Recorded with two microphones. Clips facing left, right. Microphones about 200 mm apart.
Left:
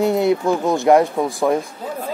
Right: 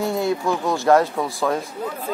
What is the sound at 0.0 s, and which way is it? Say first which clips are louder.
Speech: left 5 dB; 20° left (ahead or behind).